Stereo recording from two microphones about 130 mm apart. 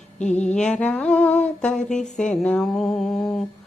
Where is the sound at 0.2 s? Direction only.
60° left (ahead or behind).